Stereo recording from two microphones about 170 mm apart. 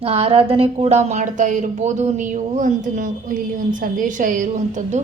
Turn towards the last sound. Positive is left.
turn(degrees=-50)  # may be behind; listen again after turning